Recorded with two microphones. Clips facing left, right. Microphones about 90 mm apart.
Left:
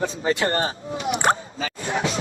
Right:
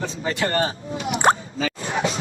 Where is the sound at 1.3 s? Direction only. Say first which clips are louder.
Right 3 dB; 35° left (ahead or behind).